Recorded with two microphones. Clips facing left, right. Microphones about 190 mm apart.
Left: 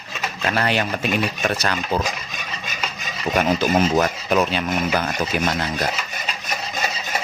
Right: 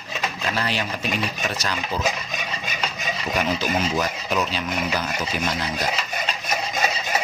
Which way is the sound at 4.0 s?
55° left (ahead or behind).